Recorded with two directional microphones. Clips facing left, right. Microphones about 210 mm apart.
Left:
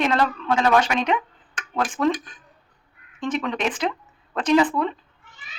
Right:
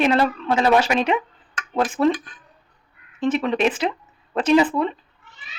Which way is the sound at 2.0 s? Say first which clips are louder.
Right 3 dB; 25° right (ahead or behind).